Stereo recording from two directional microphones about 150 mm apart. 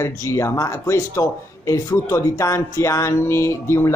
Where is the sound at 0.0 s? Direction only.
20° left (ahead or behind).